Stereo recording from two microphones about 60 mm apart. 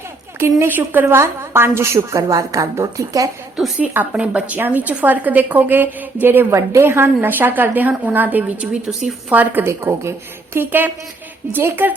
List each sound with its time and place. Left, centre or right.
0.3 s a woman's voice: right
0.7 s a woman's voice: right
1.2 s a woman's voice: right
3.6 s speech: centre
4.1 s a woman's voice: right
6.5 s a woman's voice: right
8.9 s a woman's voice: centre
9.3 s a woman's voice: right
9.6 s a woman's voice: right